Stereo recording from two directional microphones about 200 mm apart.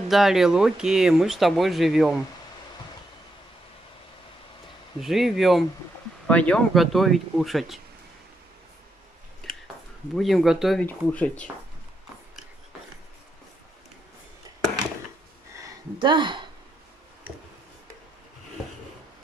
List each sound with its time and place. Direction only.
0.1 s speech: centre (ahead or behind)
5.0 s speech: centre (ahead or behind)
10.1 s speech: centre (ahead or behind)
15.5 s a sound: 20° right (ahead or behind)